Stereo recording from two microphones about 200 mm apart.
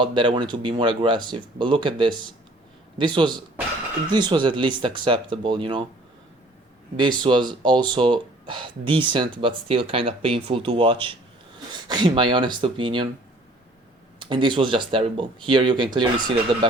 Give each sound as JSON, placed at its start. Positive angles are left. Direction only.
{"t": 0.0, "sound": "speech", "side_deg": -25}
{"t": 6.9, "sound": "speech", "side_deg": -25}
{"t": 14.2, "sound": "speech", "side_deg": -25}